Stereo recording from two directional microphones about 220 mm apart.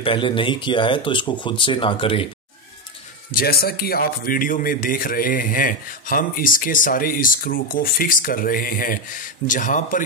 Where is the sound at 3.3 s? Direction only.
45° left (ahead or behind).